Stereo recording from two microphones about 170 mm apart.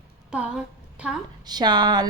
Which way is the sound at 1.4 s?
25° right (ahead or behind).